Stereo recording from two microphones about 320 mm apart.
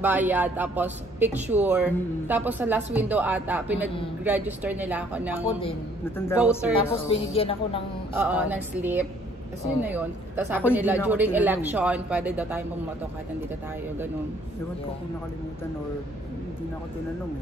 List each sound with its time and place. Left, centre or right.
0.0 s speech: centre
5.5 s a woman's voice: centre
8.2 s speech: centre